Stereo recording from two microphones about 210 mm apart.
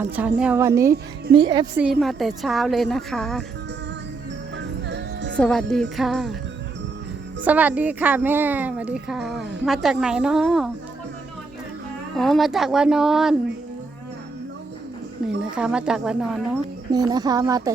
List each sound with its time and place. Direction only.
0.0 s a woman's voice: 10° right (ahead or behind)
1.3 s a child's voice: 20° right (ahead or behind)
1.8 s speech: centre (ahead or behind)
4.5 s music: 55° right (ahead or behind)
5.4 s speech: 5° left (ahead or behind)
7.4 s speech: 5° right (ahead or behind)
12.1 s speech: centre (ahead or behind)
15.5 s speech: 5° right (ahead or behind)
16.9 s a child's voice: 20° right (ahead or behind)